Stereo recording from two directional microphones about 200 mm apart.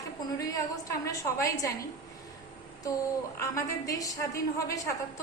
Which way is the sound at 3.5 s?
15° left (ahead or behind).